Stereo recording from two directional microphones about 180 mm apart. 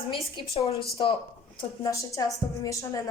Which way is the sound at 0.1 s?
30° left (ahead or behind).